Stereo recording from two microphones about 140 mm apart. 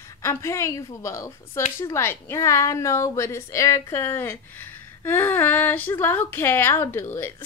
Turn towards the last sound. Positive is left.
turn(degrees=15)  # may be behind; listen again after turning